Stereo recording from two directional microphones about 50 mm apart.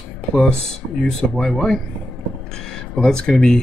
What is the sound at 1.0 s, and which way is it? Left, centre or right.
Speech, centre.